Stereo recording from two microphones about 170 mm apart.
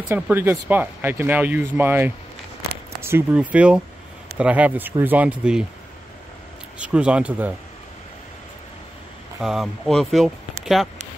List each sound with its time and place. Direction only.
0.1 s speech: 15° right (ahead or behind)
6.8 s speech: 5° right (ahead or behind)
9.4 s speech: centre (ahead or behind)